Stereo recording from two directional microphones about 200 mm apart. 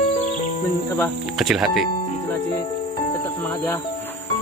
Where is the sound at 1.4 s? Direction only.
Centre (ahead or behind).